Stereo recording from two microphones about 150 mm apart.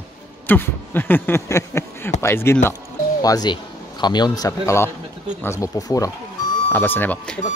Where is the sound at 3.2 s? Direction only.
25° left (ahead or behind); by 7.4 s 10° left (ahead or behind).